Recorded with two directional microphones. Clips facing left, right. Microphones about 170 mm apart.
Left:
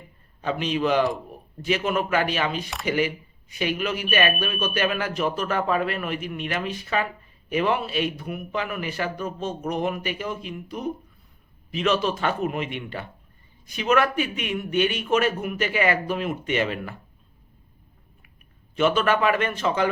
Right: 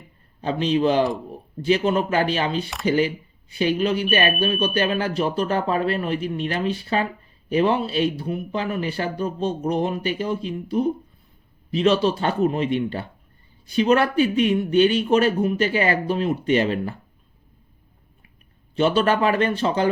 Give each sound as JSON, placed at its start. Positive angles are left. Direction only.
{"t": 0.4, "sound": "speech", "side_deg": -30}
{"t": 18.8, "sound": "speech", "side_deg": -35}